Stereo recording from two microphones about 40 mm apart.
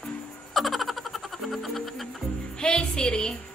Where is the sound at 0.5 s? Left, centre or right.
Centre.